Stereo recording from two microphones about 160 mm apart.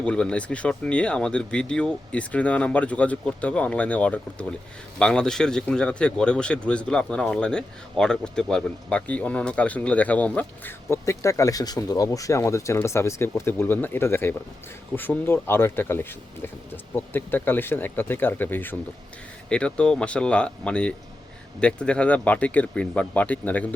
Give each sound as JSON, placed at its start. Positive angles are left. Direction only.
{"t": 0.0, "sound": "speech", "side_deg": 5}